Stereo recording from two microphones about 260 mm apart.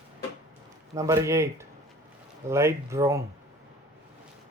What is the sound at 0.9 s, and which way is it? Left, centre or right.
Speech, centre.